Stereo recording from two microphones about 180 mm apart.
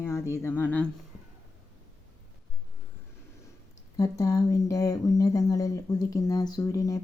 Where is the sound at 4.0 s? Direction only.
20° left (ahead or behind).